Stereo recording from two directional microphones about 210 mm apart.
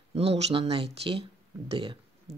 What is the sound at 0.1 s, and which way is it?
Speech, 30° right (ahead or behind).